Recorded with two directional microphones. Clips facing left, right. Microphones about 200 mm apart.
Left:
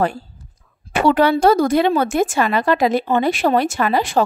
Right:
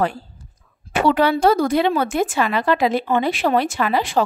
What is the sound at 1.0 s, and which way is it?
Speech, 45° left (ahead or behind).